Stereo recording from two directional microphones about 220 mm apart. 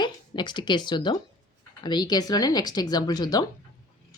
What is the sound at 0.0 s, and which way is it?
Speech, 20° left (ahead or behind).